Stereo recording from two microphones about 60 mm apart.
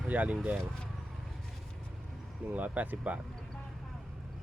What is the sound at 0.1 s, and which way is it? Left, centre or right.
Speech, right.